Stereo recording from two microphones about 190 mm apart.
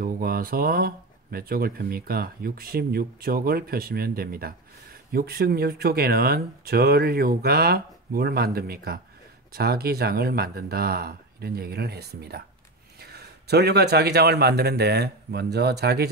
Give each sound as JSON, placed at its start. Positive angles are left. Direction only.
{"t": 0.0, "sound": "speech", "side_deg": -50}